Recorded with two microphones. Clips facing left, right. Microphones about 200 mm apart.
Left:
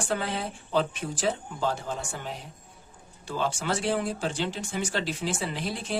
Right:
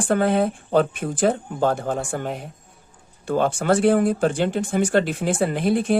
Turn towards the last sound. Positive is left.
turn(degrees=-55)  # may be behind; listen again after turning